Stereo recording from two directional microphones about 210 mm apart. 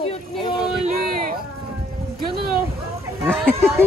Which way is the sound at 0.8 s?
40° right (ahead or behind).